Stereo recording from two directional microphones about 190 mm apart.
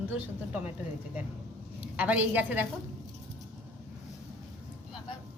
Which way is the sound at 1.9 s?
10° right (ahead or behind).